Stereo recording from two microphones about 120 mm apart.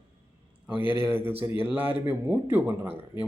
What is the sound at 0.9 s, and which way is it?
Speech, 45° left (ahead or behind).